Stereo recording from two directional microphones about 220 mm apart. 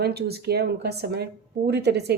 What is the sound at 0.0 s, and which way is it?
Speech, 45° right (ahead or behind).